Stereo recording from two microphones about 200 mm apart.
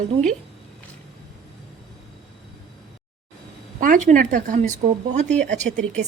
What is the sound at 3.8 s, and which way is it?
A woman's voice, 40° right (ahead or behind).